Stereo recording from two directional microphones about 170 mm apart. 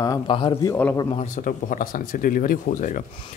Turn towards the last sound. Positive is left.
turn(degrees=55)  # may be behind; listen again after turning